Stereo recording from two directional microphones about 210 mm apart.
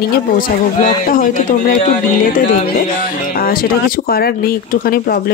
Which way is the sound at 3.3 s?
45° left (ahead or behind).